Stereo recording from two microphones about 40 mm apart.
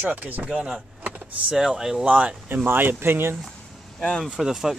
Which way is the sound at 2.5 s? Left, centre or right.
Right.